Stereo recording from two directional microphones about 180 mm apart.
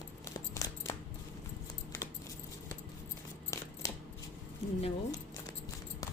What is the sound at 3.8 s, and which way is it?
Shuffling cards, 20° left (ahead or behind).